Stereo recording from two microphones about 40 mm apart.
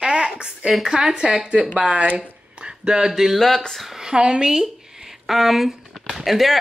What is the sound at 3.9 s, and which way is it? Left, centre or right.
Speech, centre.